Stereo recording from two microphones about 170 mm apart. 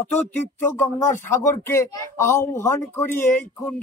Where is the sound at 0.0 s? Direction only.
10° left (ahead or behind).